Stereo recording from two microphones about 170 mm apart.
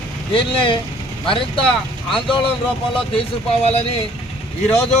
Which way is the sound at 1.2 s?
30° left (ahead or behind).